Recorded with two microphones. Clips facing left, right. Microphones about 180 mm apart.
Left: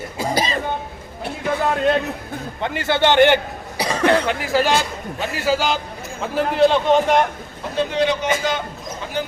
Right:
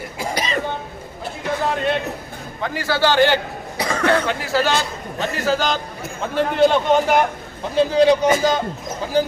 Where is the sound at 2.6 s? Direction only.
20° left (ahead or behind); by 7.2 s centre (ahead or behind).